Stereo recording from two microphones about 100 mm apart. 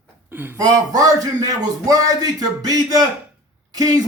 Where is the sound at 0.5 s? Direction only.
40° right (ahead or behind).